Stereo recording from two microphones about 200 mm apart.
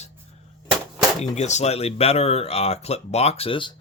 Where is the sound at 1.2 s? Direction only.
35° left (ahead or behind).